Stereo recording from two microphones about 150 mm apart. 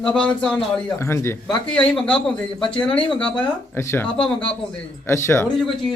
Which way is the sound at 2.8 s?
35° left (ahead or behind).